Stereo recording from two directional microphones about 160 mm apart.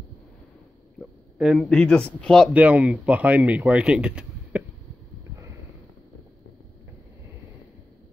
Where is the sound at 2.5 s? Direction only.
10° right (ahead or behind).